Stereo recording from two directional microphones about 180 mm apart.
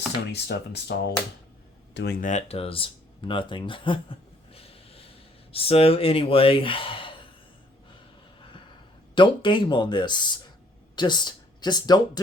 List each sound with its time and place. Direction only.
0.3 s speech: 70° left (ahead or behind)
2.2 s speech: 35° left (ahead or behind)
8.4 s a sound: 25° left (ahead or behind)
9.1 s speech: 25° left (ahead or behind)